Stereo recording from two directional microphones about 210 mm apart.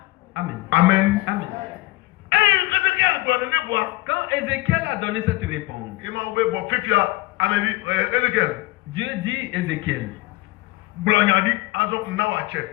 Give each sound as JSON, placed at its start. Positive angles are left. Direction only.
{"t": 0.3, "sound": "a man's voice", "side_deg": -60}
{"t": 2.3, "sound": "a sound", "side_deg": -55}
{"t": 6.0, "sound": "a man's voice", "side_deg": -60}
{"t": 11.0, "sound": "a man's voice", "side_deg": -60}